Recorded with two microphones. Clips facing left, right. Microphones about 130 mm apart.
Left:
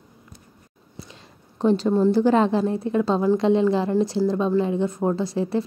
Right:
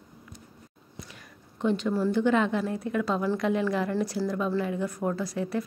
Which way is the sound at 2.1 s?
35° left (ahead or behind).